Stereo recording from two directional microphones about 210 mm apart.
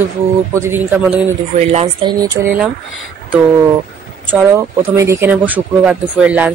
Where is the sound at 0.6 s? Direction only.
10° right (ahead or behind).